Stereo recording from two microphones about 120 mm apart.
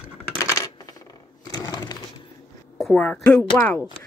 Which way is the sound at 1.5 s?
35° left (ahead or behind).